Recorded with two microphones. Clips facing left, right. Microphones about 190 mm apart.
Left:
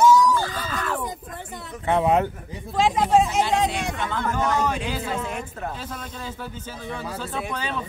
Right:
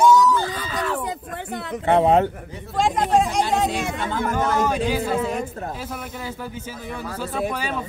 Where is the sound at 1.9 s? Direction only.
30° right (ahead or behind).